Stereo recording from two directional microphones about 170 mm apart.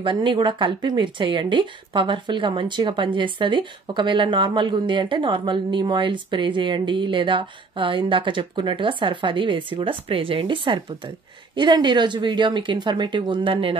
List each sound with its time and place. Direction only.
0.0 s a woman's voice: 30° right (ahead or behind)